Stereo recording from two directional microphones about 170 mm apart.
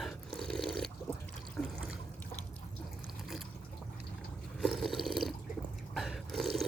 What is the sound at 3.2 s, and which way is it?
Water, centre (ahead or behind).